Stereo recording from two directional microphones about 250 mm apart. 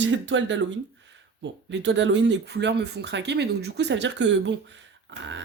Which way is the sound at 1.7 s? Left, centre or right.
Right.